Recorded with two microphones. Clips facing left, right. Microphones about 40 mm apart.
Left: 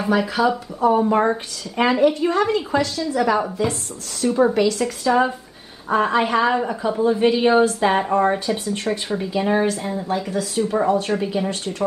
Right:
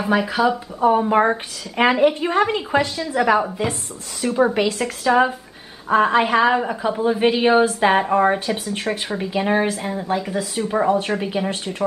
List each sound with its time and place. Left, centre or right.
0.1 s speech: centre
0.7 s a woman's voice: right
3.6 s speech: right
4.2 s speech: centre
4.6 s a woman's voice: right
5.9 s speech: centre